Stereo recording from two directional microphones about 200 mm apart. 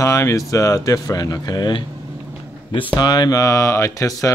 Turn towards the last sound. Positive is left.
turn(degrees=15)  # may be behind; listen again after turning